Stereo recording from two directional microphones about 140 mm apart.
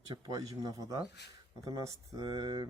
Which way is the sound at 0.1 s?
25° right (ahead or behind).